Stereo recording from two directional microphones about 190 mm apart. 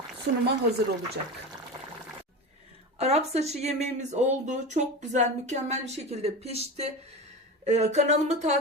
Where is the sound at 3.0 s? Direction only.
35° right (ahead or behind).